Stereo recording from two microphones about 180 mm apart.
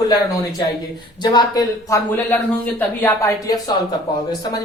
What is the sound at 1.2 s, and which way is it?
Speech, 20° left (ahead or behind).